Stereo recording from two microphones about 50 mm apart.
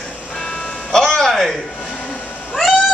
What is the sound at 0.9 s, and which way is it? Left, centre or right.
Music, centre.